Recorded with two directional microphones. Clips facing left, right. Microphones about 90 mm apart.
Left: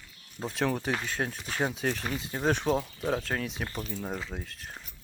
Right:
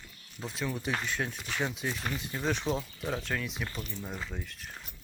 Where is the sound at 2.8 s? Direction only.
25° left (ahead or behind).